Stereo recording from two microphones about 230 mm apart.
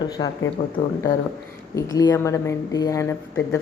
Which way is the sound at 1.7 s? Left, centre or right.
Centre.